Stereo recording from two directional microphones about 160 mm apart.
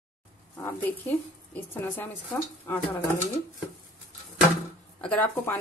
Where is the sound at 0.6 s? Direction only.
10° left (ahead or behind).